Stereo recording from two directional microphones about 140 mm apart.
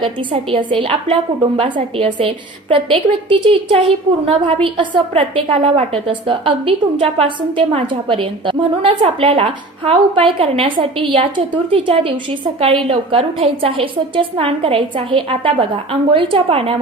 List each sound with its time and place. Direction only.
0.0 s a woman's voice: 45° right (ahead or behind)